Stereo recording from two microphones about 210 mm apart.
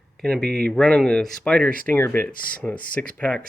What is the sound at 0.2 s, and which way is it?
Speech, 5° left (ahead or behind).